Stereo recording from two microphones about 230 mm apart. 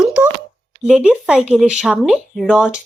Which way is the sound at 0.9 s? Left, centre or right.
Centre.